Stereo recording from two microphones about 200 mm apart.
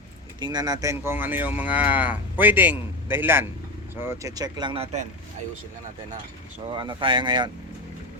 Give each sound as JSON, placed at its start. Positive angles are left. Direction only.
{"t": 0.3, "sound": "speech", "side_deg": -20}
{"t": 6.7, "sound": "speech", "side_deg": -25}